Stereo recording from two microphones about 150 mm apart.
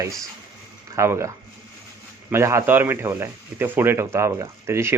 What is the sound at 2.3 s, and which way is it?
Speech, 20° right (ahead or behind).